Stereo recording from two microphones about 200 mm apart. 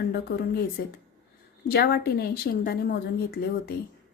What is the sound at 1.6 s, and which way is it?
A woman's voice, 50° left (ahead or behind).